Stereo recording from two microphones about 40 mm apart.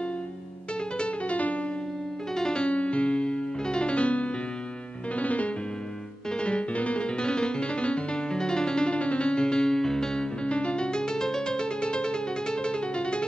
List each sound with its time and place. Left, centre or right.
0.9 s music: left
2.3 s music: centre
10.4 s music: left